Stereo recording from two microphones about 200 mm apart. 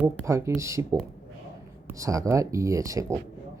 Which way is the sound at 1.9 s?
15° right (ahead or behind).